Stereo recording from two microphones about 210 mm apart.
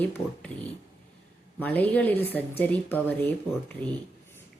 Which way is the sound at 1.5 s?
10° left (ahead or behind).